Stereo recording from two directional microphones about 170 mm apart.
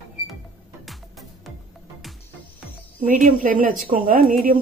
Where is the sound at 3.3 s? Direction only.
50° right (ahead or behind).